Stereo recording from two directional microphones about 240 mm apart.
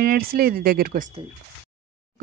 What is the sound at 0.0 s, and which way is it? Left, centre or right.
Speech, right.